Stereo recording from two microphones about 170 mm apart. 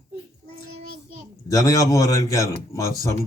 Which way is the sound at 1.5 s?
20° left (ahead or behind).